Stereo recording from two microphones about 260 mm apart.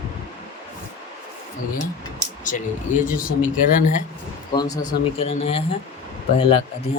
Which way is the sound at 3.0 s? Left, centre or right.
Centre.